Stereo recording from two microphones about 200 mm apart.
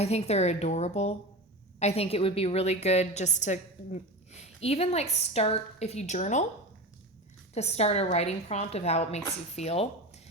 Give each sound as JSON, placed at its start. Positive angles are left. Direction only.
{"t": 0.0, "sound": "a woman's voice", "side_deg": 30}
{"t": 7.5, "sound": "a woman's voice", "side_deg": 30}